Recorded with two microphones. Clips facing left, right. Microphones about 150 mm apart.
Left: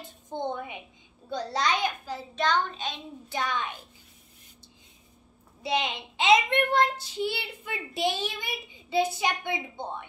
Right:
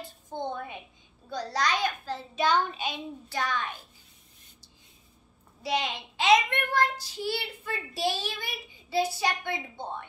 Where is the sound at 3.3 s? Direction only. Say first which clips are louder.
Left 1 dB; 20° left (ahead or behind).